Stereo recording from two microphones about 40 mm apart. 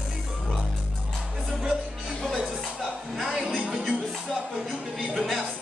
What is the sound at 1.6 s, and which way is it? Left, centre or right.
Music, right.